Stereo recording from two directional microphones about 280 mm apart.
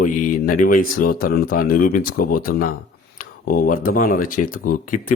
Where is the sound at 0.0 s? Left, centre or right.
Left.